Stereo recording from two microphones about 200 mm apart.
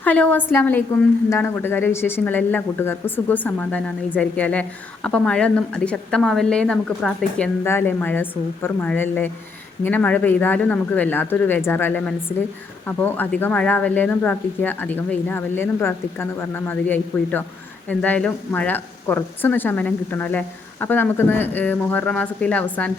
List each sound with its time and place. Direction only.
0.0 s a woman's voice: 5° left (ahead or behind)